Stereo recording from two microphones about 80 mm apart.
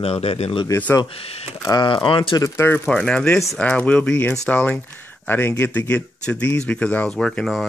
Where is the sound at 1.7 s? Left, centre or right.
Left.